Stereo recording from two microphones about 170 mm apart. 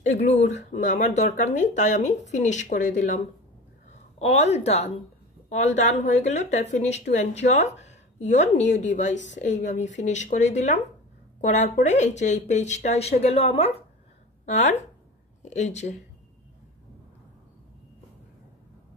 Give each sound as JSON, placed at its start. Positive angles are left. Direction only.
{"t": 0.2, "sound": "speech", "side_deg": 40}
{"t": 4.2, "sound": "a woman's voice", "side_deg": 40}